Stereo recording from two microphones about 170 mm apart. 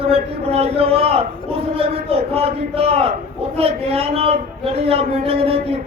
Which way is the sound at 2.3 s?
35° right (ahead or behind).